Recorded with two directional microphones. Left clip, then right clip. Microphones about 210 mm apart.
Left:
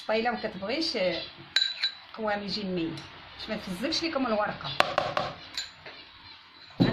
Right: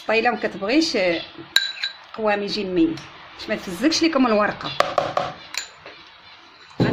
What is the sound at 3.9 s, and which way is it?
Speech, 50° right (ahead or behind).